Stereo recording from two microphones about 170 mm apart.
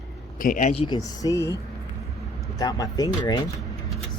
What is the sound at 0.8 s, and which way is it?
Speech, 25° left (ahead or behind).